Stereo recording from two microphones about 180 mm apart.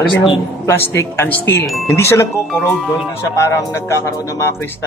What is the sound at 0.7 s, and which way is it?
Speech, 15° left (ahead or behind).